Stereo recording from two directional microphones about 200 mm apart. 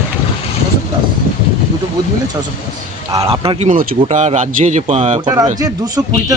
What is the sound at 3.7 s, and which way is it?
Speech, 40° right (ahead or behind).